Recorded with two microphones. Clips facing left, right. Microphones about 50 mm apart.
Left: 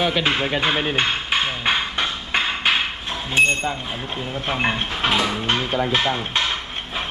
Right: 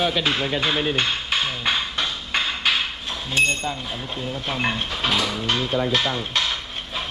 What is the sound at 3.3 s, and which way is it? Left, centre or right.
Speech, left.